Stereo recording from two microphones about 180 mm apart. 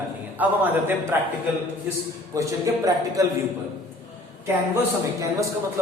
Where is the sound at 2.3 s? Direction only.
20° right (ahead or behind).